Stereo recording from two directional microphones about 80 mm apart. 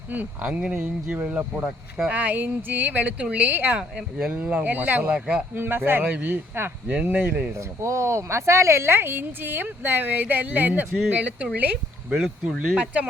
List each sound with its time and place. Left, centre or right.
0.1 s speech: centre
3.8 s speech: centre
7.8 s speech: right; by 11.4 s centre
12.1 s speech: centre
12.7 s speech: centre